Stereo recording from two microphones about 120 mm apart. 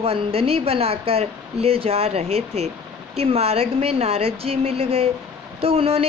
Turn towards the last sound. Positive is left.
turn(degrees=-55)  # may be behind; listen again after turning